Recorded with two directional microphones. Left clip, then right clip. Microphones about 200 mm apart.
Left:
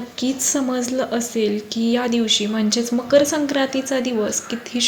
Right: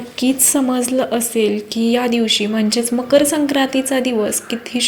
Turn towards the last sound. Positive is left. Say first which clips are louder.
# right 2 dB
turn(degrees=-10)  # may be behind; listen again after turning